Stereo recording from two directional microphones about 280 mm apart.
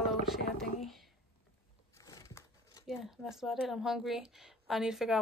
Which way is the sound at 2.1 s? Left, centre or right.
Centre.